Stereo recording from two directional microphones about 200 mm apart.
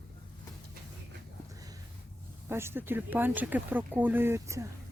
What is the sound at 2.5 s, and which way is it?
Speech, 10° right (ahead or behind).